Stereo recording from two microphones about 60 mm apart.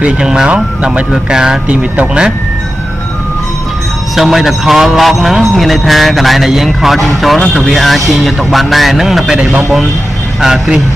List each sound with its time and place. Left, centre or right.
0.0 s speech: centre
4.1 s speech: centre
9.4 s speech: centre